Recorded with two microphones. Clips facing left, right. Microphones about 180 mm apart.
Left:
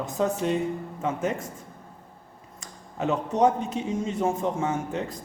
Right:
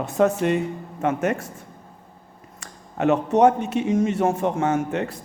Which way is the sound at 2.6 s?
75° right (ahead or behind).